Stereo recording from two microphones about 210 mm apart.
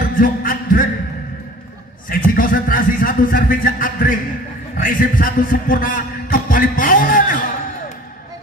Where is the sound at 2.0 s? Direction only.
40° left (ahead or behind).